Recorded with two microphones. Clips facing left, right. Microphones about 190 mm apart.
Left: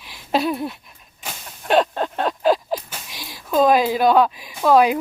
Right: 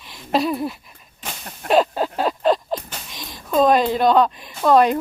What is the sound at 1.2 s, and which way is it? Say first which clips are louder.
Whip: right 2 dB; centre (ahead or behind).